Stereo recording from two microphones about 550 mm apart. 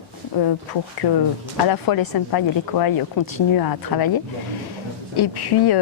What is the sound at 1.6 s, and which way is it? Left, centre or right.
A woman's voice, left.